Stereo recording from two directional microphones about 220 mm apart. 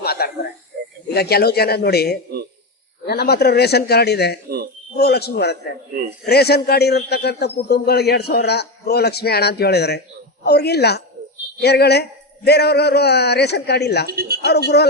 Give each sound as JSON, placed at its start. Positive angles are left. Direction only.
{"t": 0.0, "sound": "a sound", "side_deg": 45}
{"t": 1.1, "sound": "a man's voice", "side_deg": 45}
{"t": 4.4, "sound": "a sound", "side_deg": -45}
{"t": 4.9, "sound": "a man's voice", "side_deg": 45}
{"t": 14.1, "sound": "a woman's voice", "side_deg": -45}
{"t": 14.7, "sound": "a man's voice", "side_deg": 50}